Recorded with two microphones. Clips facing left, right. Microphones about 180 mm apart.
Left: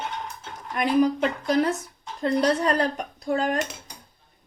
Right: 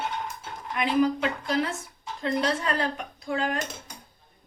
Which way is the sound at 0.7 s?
45° left (ahead or behind).